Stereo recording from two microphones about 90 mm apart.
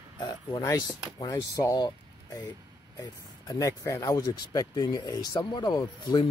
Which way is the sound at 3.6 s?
40° left (ahead or behind).